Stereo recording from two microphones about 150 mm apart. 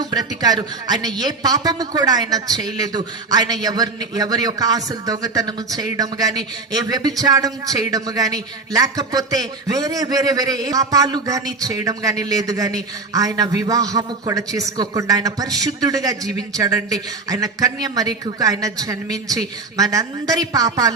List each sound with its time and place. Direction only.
0.0 s a man's voice: 25° right (ahead or behind)